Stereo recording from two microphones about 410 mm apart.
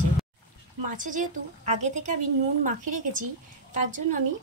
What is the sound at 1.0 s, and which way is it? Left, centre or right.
A woman's voice, centre.